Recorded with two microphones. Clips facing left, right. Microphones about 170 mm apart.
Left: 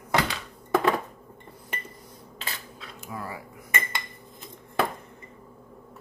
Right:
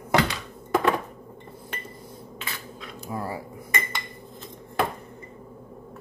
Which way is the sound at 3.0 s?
30° right (ahead or behind).